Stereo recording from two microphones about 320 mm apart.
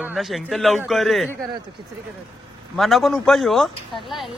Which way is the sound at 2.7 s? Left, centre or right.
Centre.